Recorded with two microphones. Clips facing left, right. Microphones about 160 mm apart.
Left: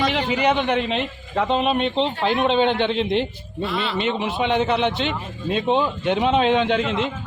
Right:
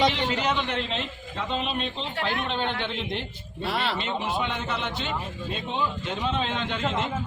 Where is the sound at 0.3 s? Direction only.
60° left (ahead or behind).